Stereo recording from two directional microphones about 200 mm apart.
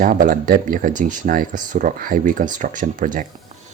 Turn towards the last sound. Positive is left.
turn(degrees=-40)  # may be behind; listen again after turning